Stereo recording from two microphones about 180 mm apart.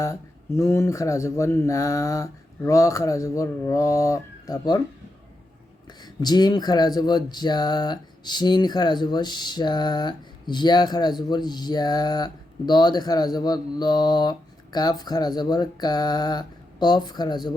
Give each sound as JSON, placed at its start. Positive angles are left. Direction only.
{"t": 0.0, "sound": "speech", "side_deg": 15}
{"t": 6.0, "sound": "speech", "side_deg": 25}